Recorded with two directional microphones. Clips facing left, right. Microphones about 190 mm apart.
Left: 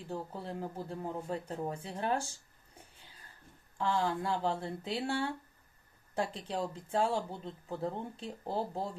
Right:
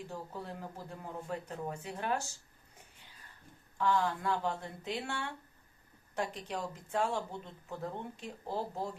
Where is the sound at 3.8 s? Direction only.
30° left (ahead or behind).